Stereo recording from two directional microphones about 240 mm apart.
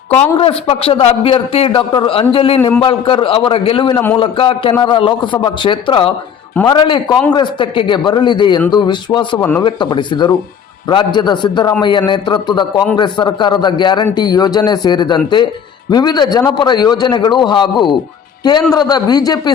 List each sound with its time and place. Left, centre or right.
0.3 s a man's voice: left
2.6 s a man's voice: centre
2.8 s a man's voice: left